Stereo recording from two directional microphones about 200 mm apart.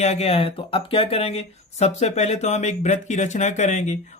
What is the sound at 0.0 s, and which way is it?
Speech, 30° left (ahead or behind).